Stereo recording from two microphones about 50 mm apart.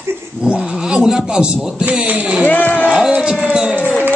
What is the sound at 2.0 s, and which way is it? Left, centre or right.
Speech, right.